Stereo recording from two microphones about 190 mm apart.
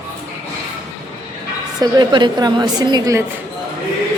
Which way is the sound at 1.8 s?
20° right (ahead or behind).